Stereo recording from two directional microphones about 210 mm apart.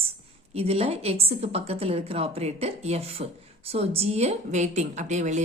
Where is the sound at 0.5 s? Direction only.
30° right (ahead or behind).